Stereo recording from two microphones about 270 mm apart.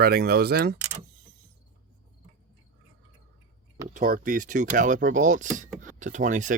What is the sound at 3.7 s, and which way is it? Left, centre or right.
Speech, right.